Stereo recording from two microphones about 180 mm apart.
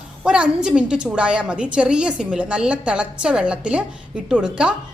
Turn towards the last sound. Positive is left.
turn(degrees=-5)  # may be behind; listen again after turning